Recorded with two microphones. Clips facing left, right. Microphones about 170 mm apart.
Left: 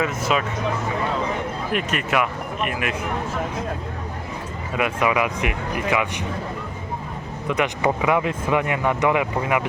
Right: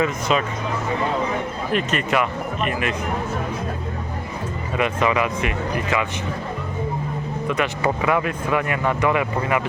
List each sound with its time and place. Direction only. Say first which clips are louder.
0.0 s speech: right 2 dB; 5° left (ahead or behind)
1.7 s speech: right 2 dB; 10° left (ahead or behind)
4.8 s speech: right 1 dB; 10° left (ahead or behind)
7.4 s speech: left 1 dB; 15° left (ahead or behind)